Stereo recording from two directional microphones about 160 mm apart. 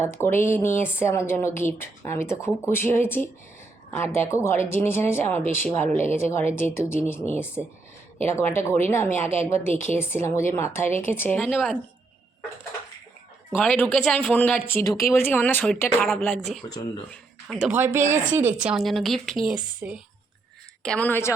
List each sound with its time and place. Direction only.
0.0 s a woman's voice: 15° left (ahead or behind)
13.5 s a woman's voice: 10° left (ahead or behind)
16.7 s speech: 25° left (ahead or behind)
17.1 s speech: 5° left (ahead or behind)
17.7 s speech: 15° right (ahead or behind)
18.0 s speech: 50° right (ahead or behind)
18.3 s speech: 10° right (ahead or behind)
20.8 s a woman's voice: 10° left (ahead or behind)